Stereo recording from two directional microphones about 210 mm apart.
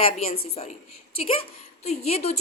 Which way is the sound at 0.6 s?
30° left (ahead or behind).